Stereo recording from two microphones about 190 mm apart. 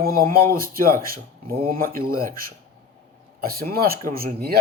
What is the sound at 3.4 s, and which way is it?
Speech, 50° right (ahead or behind).